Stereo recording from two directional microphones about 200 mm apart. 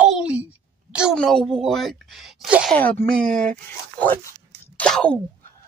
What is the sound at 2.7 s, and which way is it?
Speech, 10° left (ahead or behind).